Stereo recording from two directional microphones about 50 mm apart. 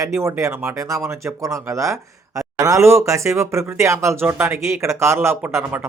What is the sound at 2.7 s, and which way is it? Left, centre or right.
Speech, right.